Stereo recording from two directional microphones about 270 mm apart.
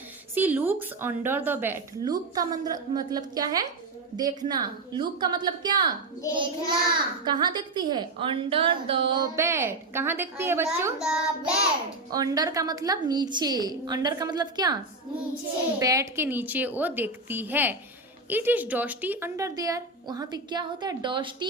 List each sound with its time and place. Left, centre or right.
0.3 s a woman's voice: centre
12.1 s a woman's voice: centre
15.8 s a woman's voice: centre